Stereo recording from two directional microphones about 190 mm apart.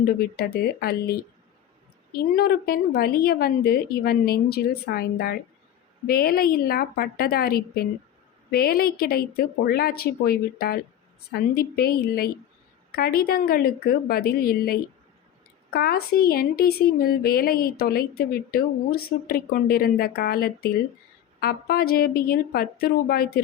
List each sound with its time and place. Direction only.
0.0 s speech: 55° left (ahead or behind)
2.3 s speech: 50° left (ahead or behind)